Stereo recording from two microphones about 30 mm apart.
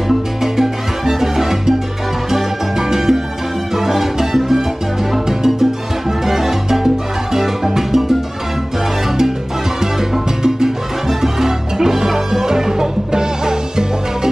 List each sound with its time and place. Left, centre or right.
0.4 s salsa music: centre
3.7 s music: centre
10.4 s salsa music: centre